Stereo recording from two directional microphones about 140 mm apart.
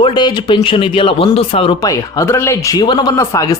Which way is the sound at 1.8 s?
20° left (ahead or behind).